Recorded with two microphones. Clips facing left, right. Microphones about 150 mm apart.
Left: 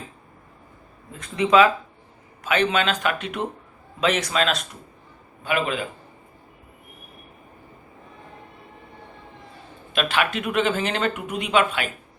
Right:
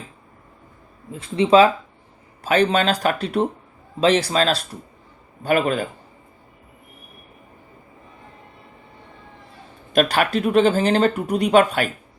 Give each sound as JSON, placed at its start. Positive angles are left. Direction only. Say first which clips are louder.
{"t": 1.1, "sound": "speech", "louder": "right 3 dB", "side_deg": -30}
{"t": 9.9, "sound": "speech", "louder": "right 5 dB", "side_deg": -40}